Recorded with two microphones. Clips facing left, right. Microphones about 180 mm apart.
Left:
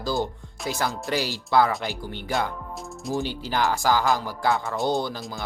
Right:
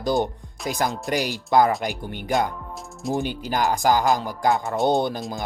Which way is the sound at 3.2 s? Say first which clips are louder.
Right 2 dB; 50° right (ahead or behind).